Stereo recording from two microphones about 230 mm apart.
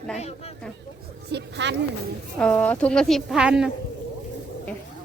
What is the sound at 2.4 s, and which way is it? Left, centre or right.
A child's voice, centre.